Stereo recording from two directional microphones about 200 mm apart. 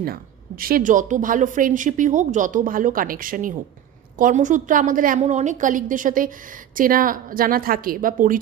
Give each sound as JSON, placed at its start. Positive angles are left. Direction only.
{"t": 0.0, "sound": "a woman's voice", "side_deg": -45}